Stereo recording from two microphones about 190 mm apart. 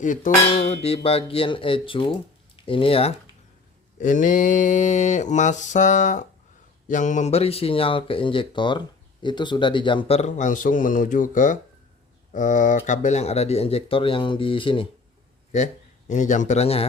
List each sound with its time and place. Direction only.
0.0 s cutlery: 45° left (ahead or behind)
0.5 s speech: 35° left (ahead or behind)
4.0 s speech: 45° left (ahead or behind); by 14.8 s 25° left (ahead or behind)
15.5 s speech: 40° left (ahead or behind)